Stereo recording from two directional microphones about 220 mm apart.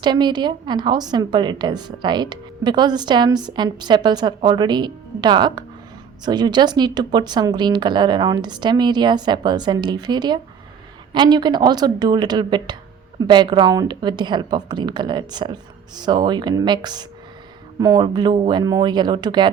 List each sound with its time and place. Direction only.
0.0 s a woman's voice: 20° right (ahead or behind)